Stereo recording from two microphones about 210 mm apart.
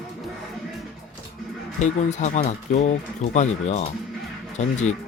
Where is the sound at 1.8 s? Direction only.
35° left (ahead or behind).